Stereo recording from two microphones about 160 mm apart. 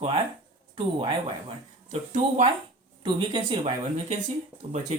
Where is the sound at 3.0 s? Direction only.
30° right (ahead or behind).